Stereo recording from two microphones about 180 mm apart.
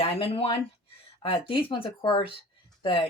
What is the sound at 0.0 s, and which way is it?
Speech, 30° left (ahead or behind).